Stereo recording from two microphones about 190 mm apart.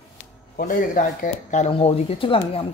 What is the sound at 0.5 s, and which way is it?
Speech, 45° left (ahead or behind).